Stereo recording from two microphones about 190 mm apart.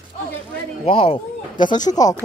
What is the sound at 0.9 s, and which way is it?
Speech, 30° left (ahead or behind).